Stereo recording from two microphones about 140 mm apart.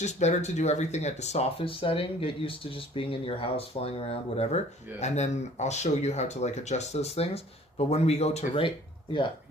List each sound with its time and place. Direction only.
0.0 s speech: 55° left (ahead or behind)